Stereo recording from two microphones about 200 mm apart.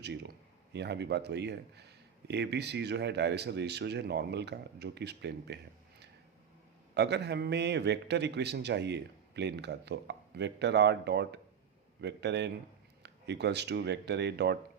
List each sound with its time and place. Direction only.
0.0 s speech: 55° right (ahead or behind)
6.9 s speech: 60° right (ahead or behind)